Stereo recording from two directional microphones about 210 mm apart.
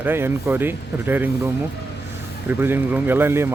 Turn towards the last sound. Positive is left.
turn(degrees=-10)  # may be behind; listen again after turning